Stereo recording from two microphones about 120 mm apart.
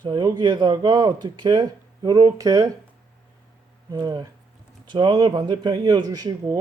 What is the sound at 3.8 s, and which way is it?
Speech, 30° right (ahead or behind).